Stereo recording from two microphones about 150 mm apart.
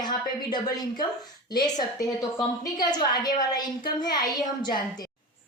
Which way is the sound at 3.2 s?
25° left (ahead or behind).